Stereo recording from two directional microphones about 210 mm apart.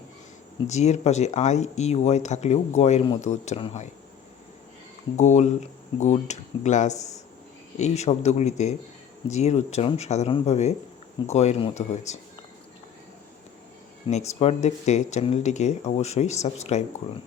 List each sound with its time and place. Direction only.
0.7 s speech: 30° left (ahead or behind)
5.1 s speech: 35° left (ahead or behind)
14.1 s speech: 30° left (ahead or behind)